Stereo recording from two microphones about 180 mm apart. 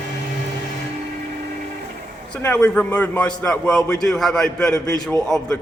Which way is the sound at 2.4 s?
10° left (ahead or behind).